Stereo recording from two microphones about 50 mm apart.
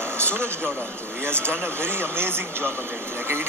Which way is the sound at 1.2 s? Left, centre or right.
Right.